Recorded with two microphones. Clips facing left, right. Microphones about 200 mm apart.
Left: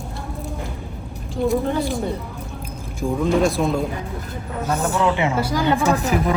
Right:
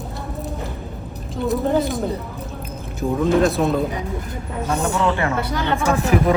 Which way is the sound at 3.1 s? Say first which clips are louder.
Right 2 dB; centre (ahead or behind).